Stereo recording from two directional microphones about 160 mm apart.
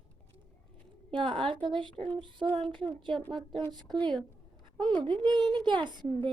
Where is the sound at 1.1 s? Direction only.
30° right (ahead or behind).